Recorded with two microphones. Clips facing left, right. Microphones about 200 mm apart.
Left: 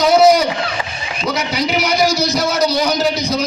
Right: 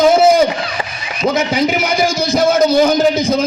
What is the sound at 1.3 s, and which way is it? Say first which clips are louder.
A man's voice: right 3 dB; 50° right (ahead or behind).